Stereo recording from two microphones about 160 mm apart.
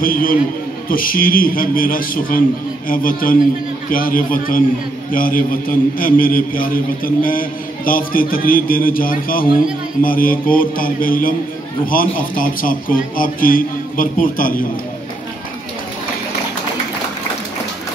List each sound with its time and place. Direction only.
0.0 s a man's voice: 60° left (ahead or behind)